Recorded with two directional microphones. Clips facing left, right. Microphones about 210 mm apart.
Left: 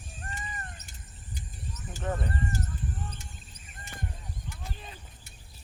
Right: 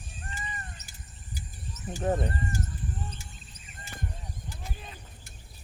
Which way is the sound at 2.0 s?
35° right (ahead or behind).